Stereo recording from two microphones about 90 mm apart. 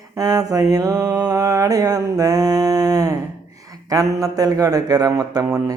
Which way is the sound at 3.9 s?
40° right (ahead or behind).